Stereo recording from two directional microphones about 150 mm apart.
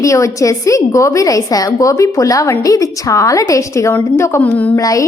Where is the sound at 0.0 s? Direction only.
20° left (ahead or behind).